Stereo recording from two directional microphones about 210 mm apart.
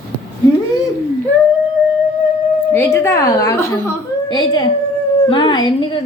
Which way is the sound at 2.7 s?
15° left (ahead or behind).